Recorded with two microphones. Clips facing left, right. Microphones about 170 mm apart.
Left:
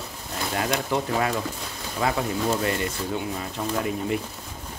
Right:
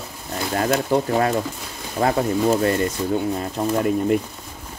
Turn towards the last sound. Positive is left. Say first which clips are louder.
# right 7 dB
turn(degrees=-45)  # may be behind; listen again after turning